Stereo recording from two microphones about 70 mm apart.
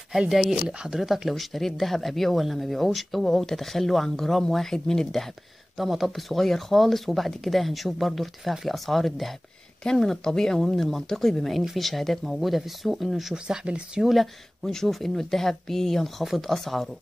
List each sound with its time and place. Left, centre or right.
0.3 s speech: centre
13.3 s speech: centre
14.0 s speech: centre